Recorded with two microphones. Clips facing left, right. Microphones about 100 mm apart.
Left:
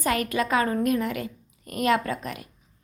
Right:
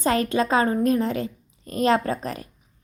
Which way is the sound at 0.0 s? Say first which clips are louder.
Right 4 dB; 30° right (ahead or behind).